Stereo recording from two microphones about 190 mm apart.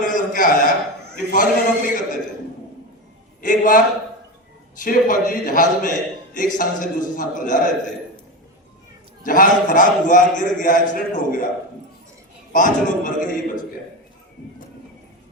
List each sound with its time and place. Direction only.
0.0 s a sound: 45° left (ahead or behind)
1.1 s a man's voice: 45° left (ahead or behind)
3.4 s a man's voice: 45° left (ahead or behind)
9.2 s a man's voice: 45° left (ahead or behind)
12.5 s a man's voice: 45° left (ahead or behind)